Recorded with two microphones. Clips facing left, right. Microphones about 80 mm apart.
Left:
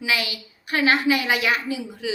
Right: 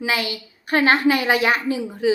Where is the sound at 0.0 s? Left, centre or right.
Right.